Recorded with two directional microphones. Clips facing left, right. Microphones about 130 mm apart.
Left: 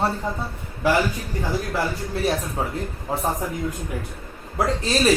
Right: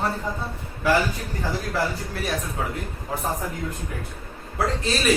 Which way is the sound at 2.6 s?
30° left (ahead or behind).